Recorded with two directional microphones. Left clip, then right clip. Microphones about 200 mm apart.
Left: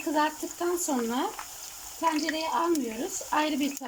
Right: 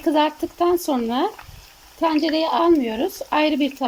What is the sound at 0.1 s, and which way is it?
Speech, 20° right (ahead or behind).